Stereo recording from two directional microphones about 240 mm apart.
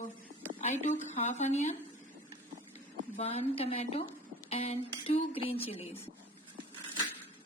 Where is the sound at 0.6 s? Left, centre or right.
Left.